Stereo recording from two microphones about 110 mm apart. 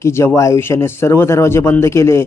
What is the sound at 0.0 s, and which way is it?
Speech, 25° left (ahead or behind).